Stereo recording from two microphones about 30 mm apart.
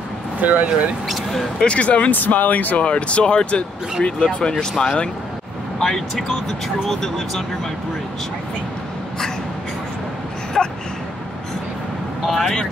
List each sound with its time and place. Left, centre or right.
0.4 s speech: right
1.7 s speech: left
2.0 s speech: left
2.8 s speech: left
5.8 s speech: centre
10.6 s gasp: centre
12.3 s speech: centre